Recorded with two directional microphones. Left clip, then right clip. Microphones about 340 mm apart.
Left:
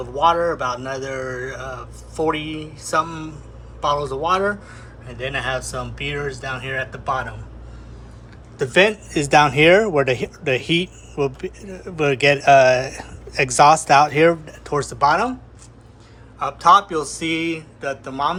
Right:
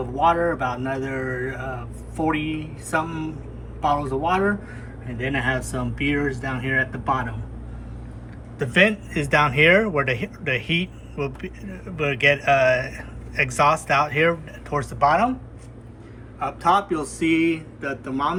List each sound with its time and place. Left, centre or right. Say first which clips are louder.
0.2 s speech: left 2 dB; centre
8.5 s speech: left 3 dB; centre
16.4 s speech: left 6 dB; centre